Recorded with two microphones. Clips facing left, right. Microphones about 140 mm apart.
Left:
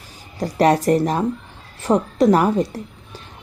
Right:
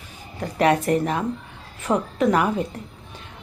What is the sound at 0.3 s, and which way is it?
A woman's voice, 35° left (ahead or behind).